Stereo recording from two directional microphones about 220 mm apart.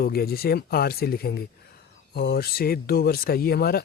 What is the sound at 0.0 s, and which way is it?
Speech, 45° left (ahead or behind).